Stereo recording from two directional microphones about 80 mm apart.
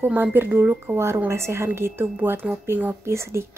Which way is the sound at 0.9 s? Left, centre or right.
Right.